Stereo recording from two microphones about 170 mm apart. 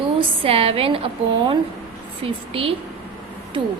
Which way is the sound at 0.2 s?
35° right (ahead or behind).